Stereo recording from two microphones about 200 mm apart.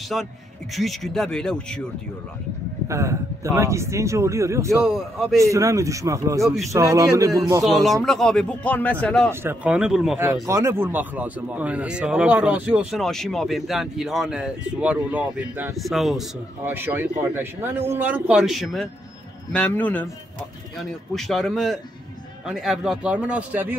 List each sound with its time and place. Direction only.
0.1 s speech: centre (ahead or behind)
2.9 s speech: 15° right (ahead or behind)
4.8 s speech: centre (ahead or behind)
5.4 s speech: 15° right (ahead or behind)
7.6 s speech: centre (ahead or behind)
9.3 s speech: 10° right (ahead or behind)